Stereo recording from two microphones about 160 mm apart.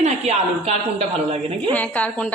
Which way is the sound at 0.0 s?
40° right (ahead or behind).